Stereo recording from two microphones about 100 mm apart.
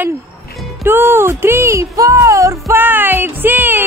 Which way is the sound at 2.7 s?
20° right (ahead or behind).